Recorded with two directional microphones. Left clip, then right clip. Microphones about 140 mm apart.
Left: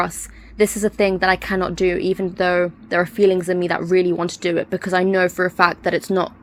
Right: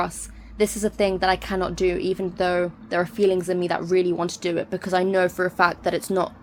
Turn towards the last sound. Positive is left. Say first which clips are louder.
# left 4 dB
turn(degrees=30)  # may be behind; listen again after turning